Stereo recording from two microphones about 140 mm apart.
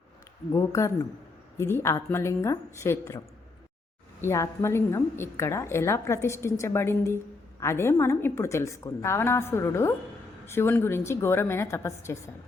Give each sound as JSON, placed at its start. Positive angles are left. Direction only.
{"t": 0.5, "sound": "a woman's voice", "side_deg": 20}
{"t": 4.2, "sound": "a woman's voice", "side_deg": 20}